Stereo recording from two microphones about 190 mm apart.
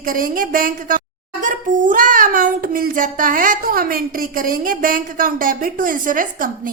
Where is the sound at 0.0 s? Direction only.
50° right (ahead or behind).